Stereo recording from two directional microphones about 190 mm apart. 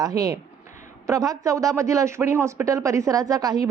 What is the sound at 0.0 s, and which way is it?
A man's voice, 20° right (ahead or behind).